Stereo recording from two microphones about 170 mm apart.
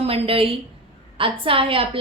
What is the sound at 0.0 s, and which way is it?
A woman's voice, 35° right (ahead or behind).